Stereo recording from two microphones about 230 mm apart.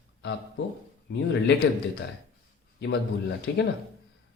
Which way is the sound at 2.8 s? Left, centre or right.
Left.